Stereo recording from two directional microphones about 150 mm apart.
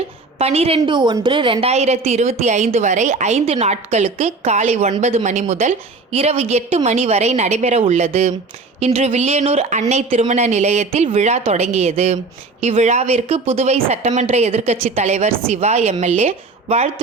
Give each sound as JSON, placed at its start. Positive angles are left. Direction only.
{"t": 0.3, "sound": "a woman's voice", "side_deg": -45}